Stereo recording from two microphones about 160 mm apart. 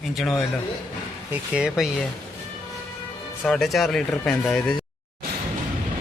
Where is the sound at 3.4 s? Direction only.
5° left (ahead or behind).